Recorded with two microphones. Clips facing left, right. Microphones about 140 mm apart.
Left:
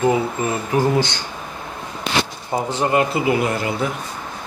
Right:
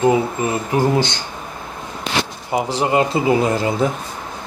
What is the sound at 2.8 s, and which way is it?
Speech, 25° right (ahead or behind).